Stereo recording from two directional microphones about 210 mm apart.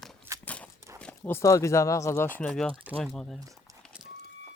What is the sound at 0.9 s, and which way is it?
Speech, 5° left (ahead or behind).